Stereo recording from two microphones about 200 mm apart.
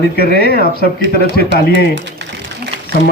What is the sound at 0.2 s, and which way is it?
Speech, 50° left (ahead or behind).